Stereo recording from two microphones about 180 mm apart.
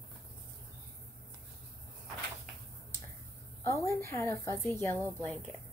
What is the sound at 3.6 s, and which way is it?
A woman's voice, 15° left (ahead or behind).